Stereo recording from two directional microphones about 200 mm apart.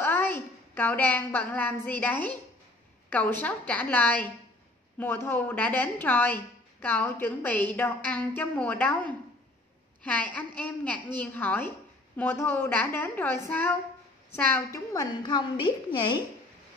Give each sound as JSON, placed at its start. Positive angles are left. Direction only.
{"t": 0.0, "sound": "a woman's voice", "side_deg": 10}